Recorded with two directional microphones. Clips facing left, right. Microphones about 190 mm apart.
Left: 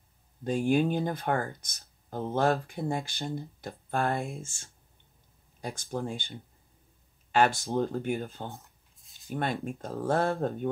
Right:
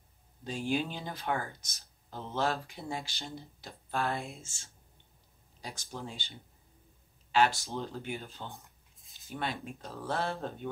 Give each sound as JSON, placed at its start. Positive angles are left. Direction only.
{"t": 0.4, "sound": "speech", "side_deg": 50}
{"t": 7.6, "sound": "speech", "side_deg": 50}